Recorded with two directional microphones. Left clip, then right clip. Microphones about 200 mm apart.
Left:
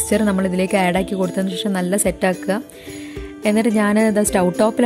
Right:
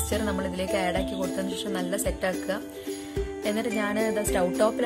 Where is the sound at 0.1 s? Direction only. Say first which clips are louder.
Left 10 dB; 35° left (ahead or behind).